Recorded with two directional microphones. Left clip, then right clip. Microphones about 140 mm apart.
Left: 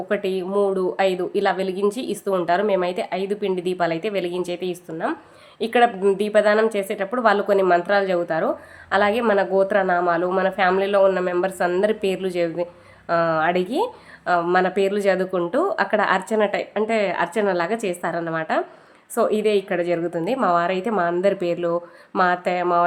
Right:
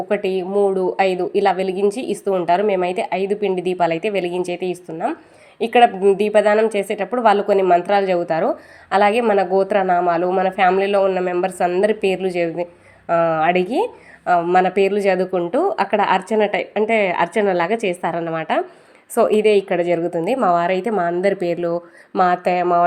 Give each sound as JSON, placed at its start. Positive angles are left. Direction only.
{"t": 0.1, "sound": "a woman's voice", "side_deg": -15}
{"t": 19.1, "sound": "a woman's voice", "side_deg": -30}